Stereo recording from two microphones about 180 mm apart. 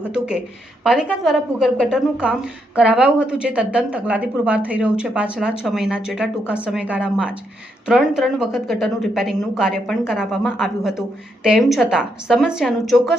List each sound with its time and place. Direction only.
0.1 s a woman's voice: 5° right (ahead or behind)